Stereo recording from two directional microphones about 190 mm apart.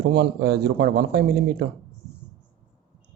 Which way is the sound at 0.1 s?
60° right (ahead or behind).